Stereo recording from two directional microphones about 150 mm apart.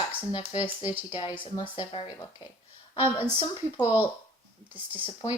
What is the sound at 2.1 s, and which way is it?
A child's voice, 25° left (ahead or behind).